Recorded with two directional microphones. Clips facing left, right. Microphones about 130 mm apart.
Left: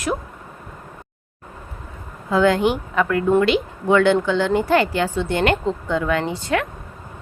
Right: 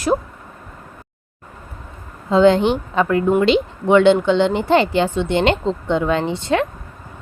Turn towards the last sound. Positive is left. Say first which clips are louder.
# right 3 dB
turn(degrees=-25)  # may be behind; listen again after turning